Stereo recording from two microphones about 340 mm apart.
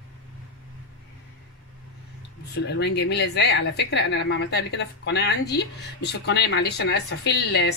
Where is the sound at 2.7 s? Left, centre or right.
Left.